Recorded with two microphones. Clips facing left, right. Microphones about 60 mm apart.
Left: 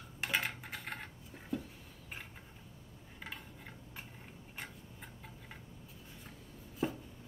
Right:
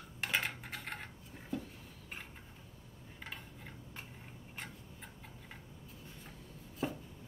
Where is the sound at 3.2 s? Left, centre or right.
Centre.